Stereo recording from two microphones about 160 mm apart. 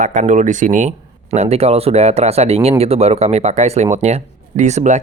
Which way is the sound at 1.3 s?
40° right (ahead or behind).